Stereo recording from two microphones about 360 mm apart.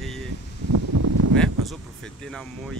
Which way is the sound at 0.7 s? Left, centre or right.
Right.